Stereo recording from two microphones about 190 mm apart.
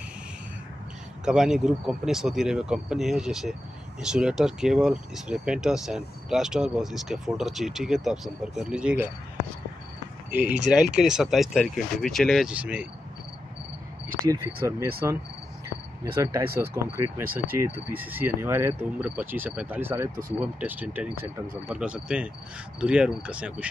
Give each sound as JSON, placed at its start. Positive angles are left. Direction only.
{"t": 1.2, "sound": "speech", "side_deg": -5}
{"t": 10.3, "sound": "speech", "side_deg": -10}
{"t": 14.3, "sound": "speech", "side_deg": -15}
{"t": 16.2, "sound": "speech", "side_deg": -20}